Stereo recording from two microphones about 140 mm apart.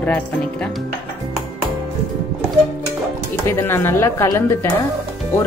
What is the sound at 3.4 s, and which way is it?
Speech, 15° left (ahead or behind).